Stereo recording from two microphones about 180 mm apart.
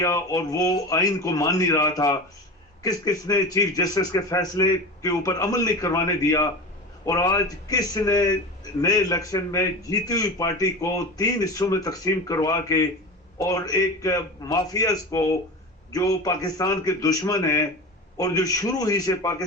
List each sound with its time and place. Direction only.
0.0 s a man's voice: 20° left (ahead or behind)